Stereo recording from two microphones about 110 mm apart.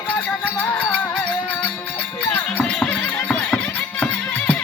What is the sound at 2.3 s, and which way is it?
Music, 15° left (ahead or behind).